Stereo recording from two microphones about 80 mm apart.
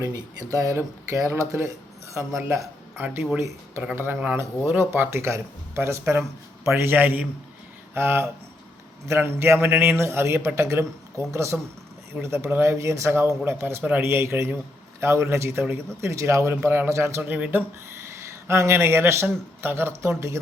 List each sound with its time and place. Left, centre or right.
0.0 s a man's voice: right
17.2 s a man's voice: right
18.4 s speech: right